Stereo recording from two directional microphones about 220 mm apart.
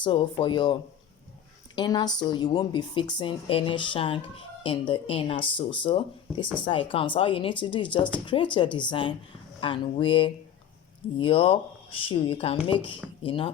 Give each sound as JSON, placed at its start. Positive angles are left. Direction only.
{"t": 0.0, "sound": "speech", "side_deg": 20}